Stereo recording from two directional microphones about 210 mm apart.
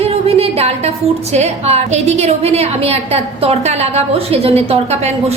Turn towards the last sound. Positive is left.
turn(degrees=-30)  # may be behind; listen again after turning